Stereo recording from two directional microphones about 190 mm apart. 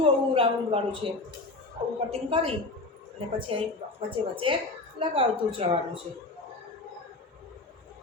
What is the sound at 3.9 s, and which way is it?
A woman's voice, 30° right (ahead or behind).